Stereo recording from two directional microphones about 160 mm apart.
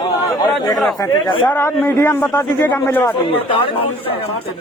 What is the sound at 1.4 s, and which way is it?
A man's voice, 10° left (ahead or behind).